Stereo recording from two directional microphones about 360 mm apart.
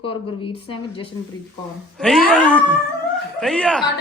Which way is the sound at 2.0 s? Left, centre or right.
Centre.